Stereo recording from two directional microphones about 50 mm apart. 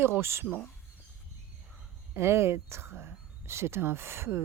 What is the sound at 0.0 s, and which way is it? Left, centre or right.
Speech, right.